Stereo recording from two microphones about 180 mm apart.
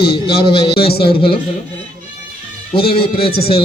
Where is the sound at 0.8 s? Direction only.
60° left (ahead or behind).